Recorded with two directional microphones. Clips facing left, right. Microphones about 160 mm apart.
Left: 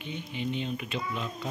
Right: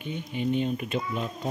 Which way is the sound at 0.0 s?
45° right (ahead or behind).